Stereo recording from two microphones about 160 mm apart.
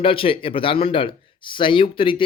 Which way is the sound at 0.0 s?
35° left (ahead or behind).